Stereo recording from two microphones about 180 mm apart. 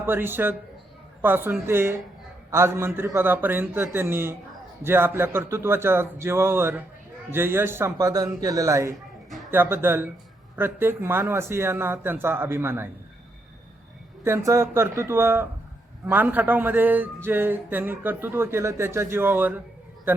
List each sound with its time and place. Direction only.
0.0 s speech: 10° right (ahead or behind)
14.3 s speech: 15° right (ahead or behind)